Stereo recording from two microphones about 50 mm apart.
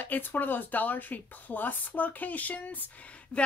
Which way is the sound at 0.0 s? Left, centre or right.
Left.